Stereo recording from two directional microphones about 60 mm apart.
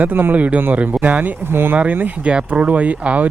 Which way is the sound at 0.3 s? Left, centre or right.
Right.